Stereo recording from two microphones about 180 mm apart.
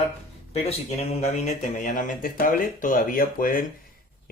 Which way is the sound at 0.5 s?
40° left (ahead or behind).